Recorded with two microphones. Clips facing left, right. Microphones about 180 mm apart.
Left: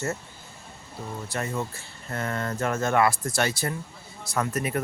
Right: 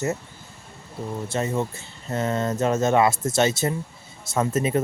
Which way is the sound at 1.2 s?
25° right (ahead or behind).